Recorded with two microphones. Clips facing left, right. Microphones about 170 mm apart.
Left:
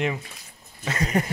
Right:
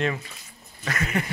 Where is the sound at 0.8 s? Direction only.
35° left (ahead or behind).